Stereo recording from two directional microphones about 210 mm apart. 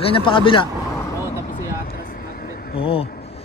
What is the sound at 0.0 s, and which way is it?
Speech, 25° left (ahead or behind).